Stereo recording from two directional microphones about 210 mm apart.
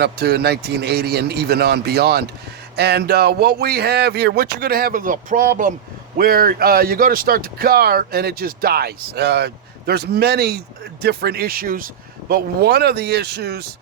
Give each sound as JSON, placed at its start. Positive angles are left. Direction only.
{"t": 0.0, "sound": "speech", "side_deg": -50}